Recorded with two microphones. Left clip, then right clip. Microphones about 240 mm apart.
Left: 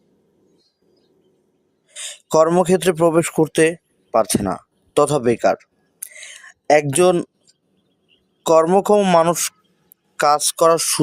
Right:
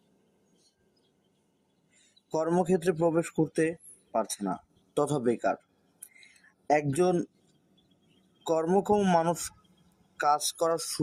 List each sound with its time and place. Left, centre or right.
2.3 s speech: left
6.0 s a sound: left
8.4 s speech: left